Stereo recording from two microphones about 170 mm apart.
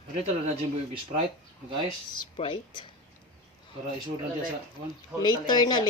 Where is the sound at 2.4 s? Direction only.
30° left (ahead or behind).